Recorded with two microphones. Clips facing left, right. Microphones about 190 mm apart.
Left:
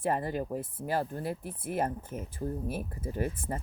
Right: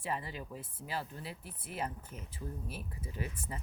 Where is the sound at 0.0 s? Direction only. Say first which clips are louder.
Left 9 dB; 50° left (ahead or behind).